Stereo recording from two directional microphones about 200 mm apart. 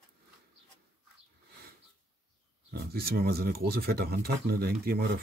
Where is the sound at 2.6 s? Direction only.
50° right (ahead or behind).